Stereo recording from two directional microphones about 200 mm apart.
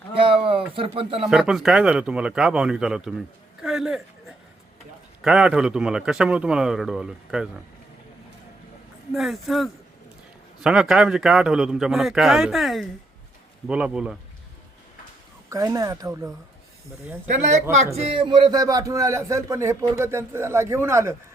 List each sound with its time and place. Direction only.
0.1 s a sound: 25° right (ahead or behind)
0.8 s speech: 25° right (ahead or behind)
1.2 s speech: 5° right (ahead or behind)
9.1 s speech: centre (ahead or behind)
15.4 s a man's voice: 15° right (ahead or behind)
17.9 s a man's voice: 25° right (ahead or behind)